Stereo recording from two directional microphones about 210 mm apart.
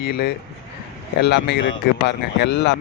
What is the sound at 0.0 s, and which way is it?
Speech, 50° left (ahead or behind).